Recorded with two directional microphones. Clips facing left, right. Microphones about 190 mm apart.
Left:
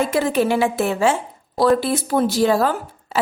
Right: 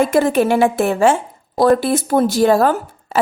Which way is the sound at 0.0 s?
50° right (ahead or behind).